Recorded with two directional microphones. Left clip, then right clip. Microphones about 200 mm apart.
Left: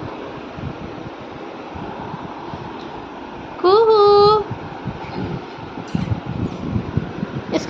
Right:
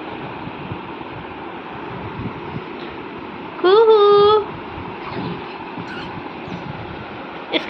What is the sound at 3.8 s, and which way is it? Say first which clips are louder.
Child singing: right 2 dB; 15° right (ahead or behind).